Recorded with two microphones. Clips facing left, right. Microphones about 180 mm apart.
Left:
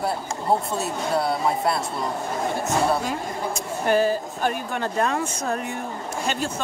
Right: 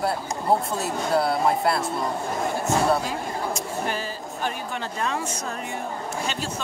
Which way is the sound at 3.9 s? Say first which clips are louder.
Left 10 dB; 50° left (ahead or behind).